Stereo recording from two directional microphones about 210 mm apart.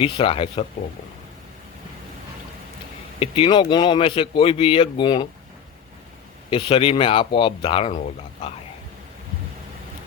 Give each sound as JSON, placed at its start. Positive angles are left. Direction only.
{"t": 0.0, "sound": "speech", "side_deg": 25}
{"t": 3.2, "sound": "speech", "side_deg": 25}
{"t": 6.5, "sound": "speech", "side_deg": 25}